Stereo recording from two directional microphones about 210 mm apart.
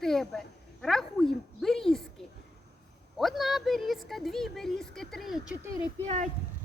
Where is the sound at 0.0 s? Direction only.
Centre (ahead or behind).